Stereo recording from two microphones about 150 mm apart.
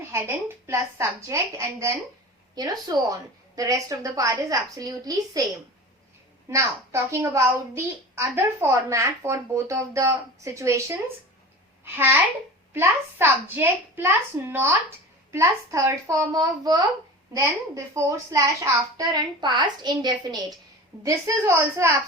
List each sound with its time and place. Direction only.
0.1 s a woman's voice: 15° right (ahead or behind)
6.5 s a woman's voice: 20° right (ahead or behind)
12.7 s a child's voice: 15° right (ahead or behind)